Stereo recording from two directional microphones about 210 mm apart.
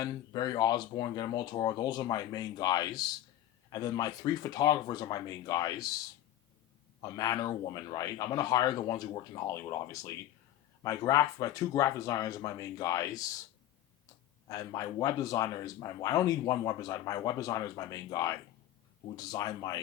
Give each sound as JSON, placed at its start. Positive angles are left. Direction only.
{"t": 0.0, "sound": "speech", "side_deg": 20}
{"t": 7.0, "sound": "speech", "side_deg": 20}
{"t": 14.4, "sound": "speech", "side_deg": 15}